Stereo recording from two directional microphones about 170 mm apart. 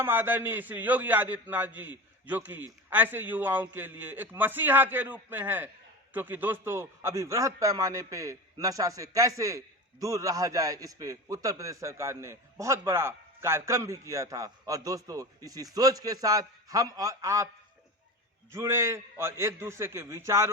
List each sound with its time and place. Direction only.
0.0 s a man's voice: 15° right (ahead or behind)
18.5 s a man's voice: 15° right (ahead or behind)